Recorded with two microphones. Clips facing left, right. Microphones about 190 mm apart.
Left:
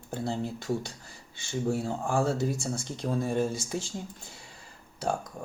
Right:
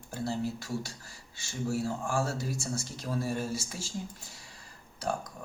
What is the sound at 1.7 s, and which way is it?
Speech, 25° left (ahead or behind).